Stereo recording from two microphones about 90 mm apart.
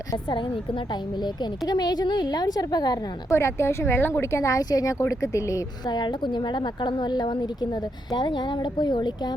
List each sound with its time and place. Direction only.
0.3 s a woman's voice: 65° left (ahead or behind)
1.2 s a woman's voice: 50° left (ahead or behind)
3.2 s a woman's voice: 30° left (ahead or behind)
5.8 s a woman's voice: 55° left (ahead or behind)